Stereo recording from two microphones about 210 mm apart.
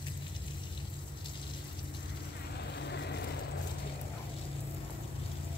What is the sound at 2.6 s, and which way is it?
Vehicle, 55° left (ahead or behind).